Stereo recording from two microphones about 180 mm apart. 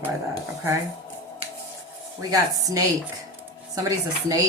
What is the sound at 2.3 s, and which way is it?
A woman's voice, 20° right (ahead or behind).